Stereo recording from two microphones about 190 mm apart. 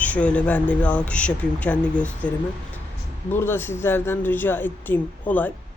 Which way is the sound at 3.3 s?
10° left (ahead or behind).